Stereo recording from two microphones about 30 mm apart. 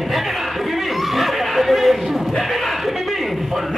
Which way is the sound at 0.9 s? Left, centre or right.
Centre.